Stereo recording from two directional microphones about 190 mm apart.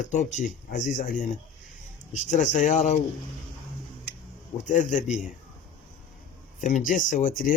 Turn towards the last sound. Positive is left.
turn(degrees=45)  # may be behind; listen again after turning